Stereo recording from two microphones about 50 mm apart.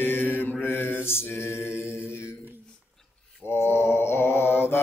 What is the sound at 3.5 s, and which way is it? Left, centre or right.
Mantra, left.